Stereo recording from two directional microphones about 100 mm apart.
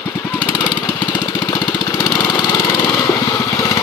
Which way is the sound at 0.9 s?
50° left (ahead or behind).